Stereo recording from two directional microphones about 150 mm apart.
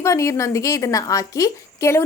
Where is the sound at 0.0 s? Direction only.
20° left (ahead or behind).